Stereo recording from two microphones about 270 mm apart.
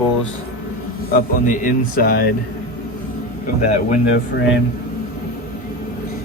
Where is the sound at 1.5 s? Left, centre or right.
Left.